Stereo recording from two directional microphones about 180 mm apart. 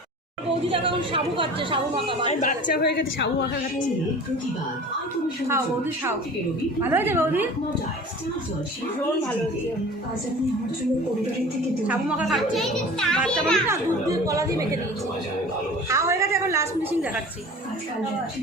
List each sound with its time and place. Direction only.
0.7 s a woman's voice: 30° right (ahead or behind)
2.2 s a woman's voice: 45° left (ahead or behind)
2.8 s a woman's voice: 65° left (ahead or behind)
5.5 s speech: 15° right (ahead or behind)
11.9 s a child's voice: 5° right (ahead or behind)
13.7 s speech: 15° right (ahead or behind)
15.9 s a woman's voice: 15° right (ahead or behind)